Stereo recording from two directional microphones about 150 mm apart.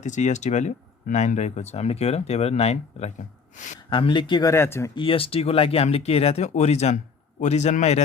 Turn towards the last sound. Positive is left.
turn(degrees=50)  # may be behind; listen again after turning